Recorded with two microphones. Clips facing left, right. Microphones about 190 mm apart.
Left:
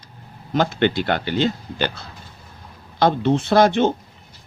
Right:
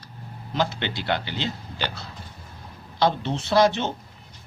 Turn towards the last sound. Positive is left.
turn(degrees=55)  # may be behind; listen again after turning